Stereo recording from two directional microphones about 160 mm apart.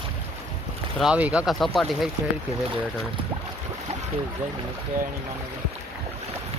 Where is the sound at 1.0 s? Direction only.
5° right (ahead or behind).